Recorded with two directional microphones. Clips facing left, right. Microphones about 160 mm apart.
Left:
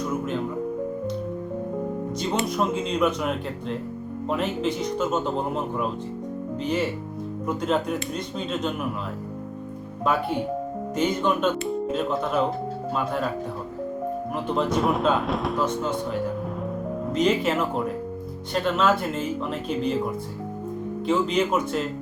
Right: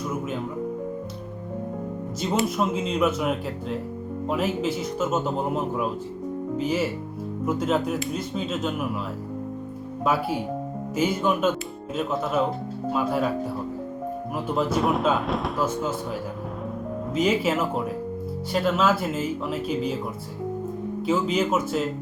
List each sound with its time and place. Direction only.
2.3 s speech: centre (ahead or behind)
10.0 s speech: 5° right (ahead or behind)
14.3 s speech: 5° right (ahead or behind)
21.1 s speech: 5° right (ahead or behind)